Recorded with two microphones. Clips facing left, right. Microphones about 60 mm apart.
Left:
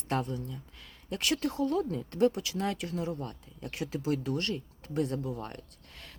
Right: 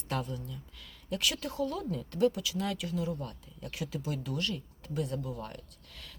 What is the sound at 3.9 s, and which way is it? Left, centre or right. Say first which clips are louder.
A woman's voice: left 7 dB; left.